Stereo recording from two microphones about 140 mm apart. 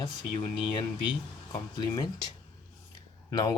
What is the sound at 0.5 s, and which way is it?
Speech, 30° left (ahead or behind).